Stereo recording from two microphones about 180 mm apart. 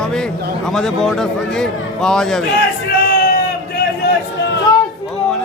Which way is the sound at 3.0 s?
55° left (ahead or behind).